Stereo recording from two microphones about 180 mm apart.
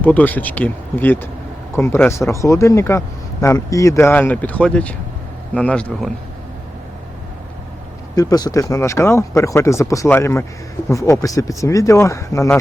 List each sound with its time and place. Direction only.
0.0 s speech: 10° left (ahead or behind)
8.1 s speech: 20° left (ahead or behind)